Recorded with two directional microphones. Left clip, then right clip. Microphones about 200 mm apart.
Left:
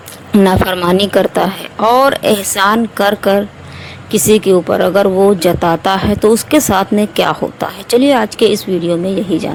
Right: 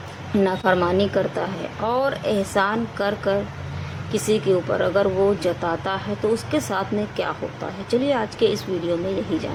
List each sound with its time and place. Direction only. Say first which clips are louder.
0.3 s speech: left 8 dB; 45° left (ahead or behind)